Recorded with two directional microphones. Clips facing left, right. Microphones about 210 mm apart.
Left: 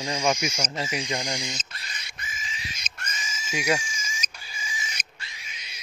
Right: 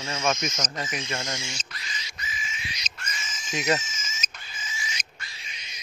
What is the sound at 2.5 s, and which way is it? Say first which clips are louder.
Bird: even; 35° left (ahead or behind).